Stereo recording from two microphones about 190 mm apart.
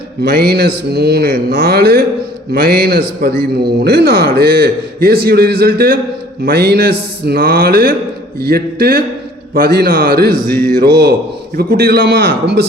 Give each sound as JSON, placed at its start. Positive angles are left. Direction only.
{"t": 0.2, "sound": "a man's voice", "side_deg": -55}
{"t": 10.4, "sound": "a sound", "side_deg": 10}
{"t": 10.8, "sound": "a man's voice", "side_deg": -55}